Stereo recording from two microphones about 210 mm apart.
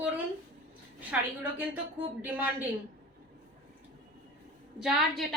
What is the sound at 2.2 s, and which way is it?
Speech, 10° right (ahead or behind).